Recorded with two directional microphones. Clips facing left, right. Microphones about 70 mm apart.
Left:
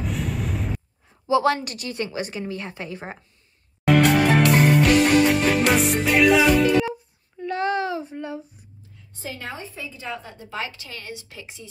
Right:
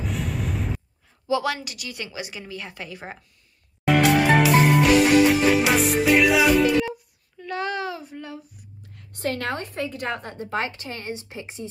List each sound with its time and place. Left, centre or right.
0.0 s music: centre
1.2 s a woman's voice: left
3.8 s music: centre
7.3 s child singing: left
8.9 s a woman's voice: right